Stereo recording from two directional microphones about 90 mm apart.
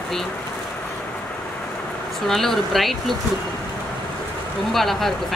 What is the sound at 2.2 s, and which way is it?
Speech, 5° left (ahead or behind).